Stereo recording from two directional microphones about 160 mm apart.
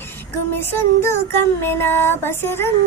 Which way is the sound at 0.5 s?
15° left (ahead or behind).